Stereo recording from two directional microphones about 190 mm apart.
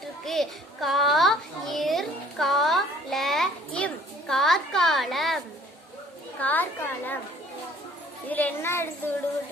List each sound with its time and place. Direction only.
0.0 s child singing: centre (ahead or behind)
6.4 s a woman's voice: 10° left (ahead or behind)
8.3 s a woman's voice: 10° left (ahead or behind)